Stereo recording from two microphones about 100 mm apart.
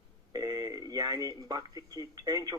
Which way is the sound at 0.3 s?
40° right (ahead or behind).